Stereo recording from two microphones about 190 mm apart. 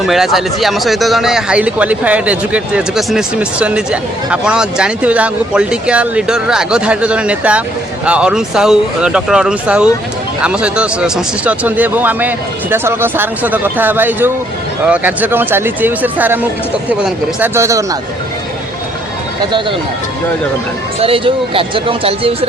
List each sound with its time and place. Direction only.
0.0 s speech: centre (ahead or behind)
21.0 s speech: 30° right (ahead or behind)